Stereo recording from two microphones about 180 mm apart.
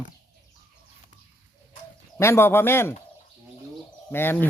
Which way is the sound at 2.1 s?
15° left (ahead or behind).